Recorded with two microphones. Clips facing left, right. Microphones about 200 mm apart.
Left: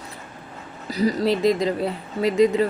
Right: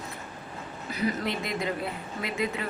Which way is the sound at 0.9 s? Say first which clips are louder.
Left 9 dB; 35° left (ahead or behind).